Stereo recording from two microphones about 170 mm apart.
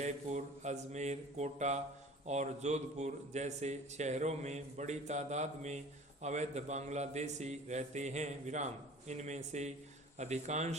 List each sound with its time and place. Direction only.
0.0 s a man's voice: 45° right (ahead or behind)